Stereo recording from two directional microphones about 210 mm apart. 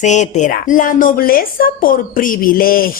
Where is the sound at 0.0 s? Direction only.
35° left (ahead or behind).